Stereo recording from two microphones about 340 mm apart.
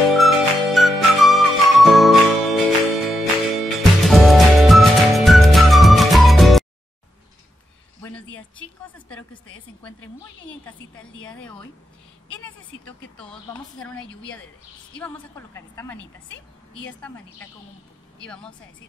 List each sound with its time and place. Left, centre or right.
0.1 s music: centre
8.0 s a sound: centre
10.8 s a woman's voice: left
15.0 s a woman's voice: centre
18.2 s a woman's voice: centre